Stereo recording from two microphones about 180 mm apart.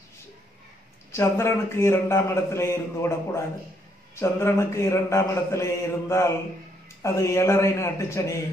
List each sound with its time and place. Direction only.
1.1 s a man's voice: 15° left (ahead or behind)